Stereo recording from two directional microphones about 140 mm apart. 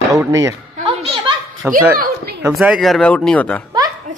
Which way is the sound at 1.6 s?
10° right (ahead or behind).